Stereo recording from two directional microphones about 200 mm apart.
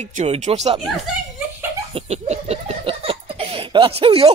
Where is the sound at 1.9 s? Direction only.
30° right (ahead or behind).